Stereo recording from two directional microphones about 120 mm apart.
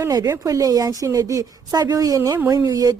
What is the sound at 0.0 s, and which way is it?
Speech, 30° right (ahead or behind).